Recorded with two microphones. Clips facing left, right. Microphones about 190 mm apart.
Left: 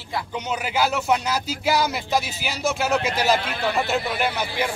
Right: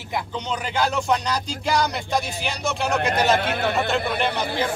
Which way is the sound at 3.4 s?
55° right (ahead or behind).